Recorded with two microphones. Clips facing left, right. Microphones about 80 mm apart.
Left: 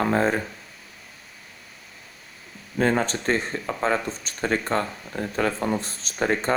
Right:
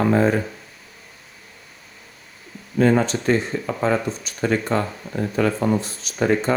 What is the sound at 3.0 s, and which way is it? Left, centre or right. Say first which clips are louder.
Speech: right 4 dB; left.